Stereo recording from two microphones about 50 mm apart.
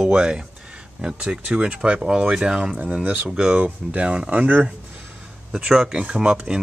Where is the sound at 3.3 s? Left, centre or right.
Centre.